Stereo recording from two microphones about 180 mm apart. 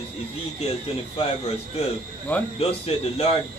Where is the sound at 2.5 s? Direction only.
35° left (ahead or behind).